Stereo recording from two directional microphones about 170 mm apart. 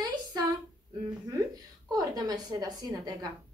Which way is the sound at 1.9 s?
20° right (ahead or behind).